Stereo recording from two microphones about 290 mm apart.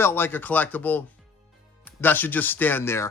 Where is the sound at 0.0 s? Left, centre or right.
Centre.